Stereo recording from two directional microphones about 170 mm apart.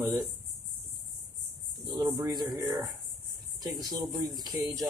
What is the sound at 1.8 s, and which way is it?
Speech, 25° right (ahead or behind).